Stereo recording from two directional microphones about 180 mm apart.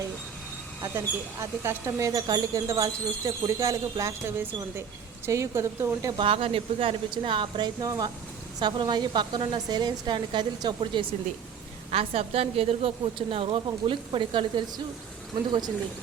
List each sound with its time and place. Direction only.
0.8 s speech: 15° right (ahead or behind)
6.1 s a woman's voice: 30° right (ahead or behind)